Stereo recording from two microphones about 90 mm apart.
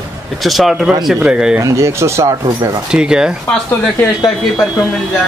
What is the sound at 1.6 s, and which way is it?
Speech, 35° right (ahead or behind).